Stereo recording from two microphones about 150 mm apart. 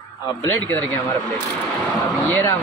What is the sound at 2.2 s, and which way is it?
Speech, 15° left (ahead or behind).